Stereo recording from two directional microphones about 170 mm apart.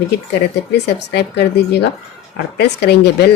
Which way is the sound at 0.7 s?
75° left (ahead or behind).